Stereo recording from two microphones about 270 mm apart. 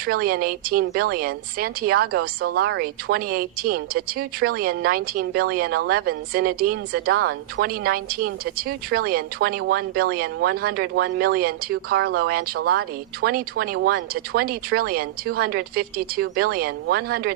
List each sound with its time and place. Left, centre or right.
0.0 s speech: right